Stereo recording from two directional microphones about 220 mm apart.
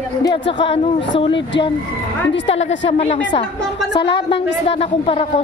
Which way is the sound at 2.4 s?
25° left (ahead or behind).